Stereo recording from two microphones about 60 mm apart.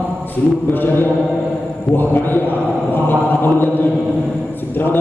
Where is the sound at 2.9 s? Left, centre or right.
Left.